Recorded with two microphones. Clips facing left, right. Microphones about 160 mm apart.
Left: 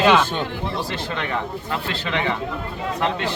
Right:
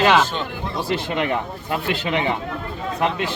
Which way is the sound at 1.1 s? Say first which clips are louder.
Right 3 dB; 20° right (ahead or behind).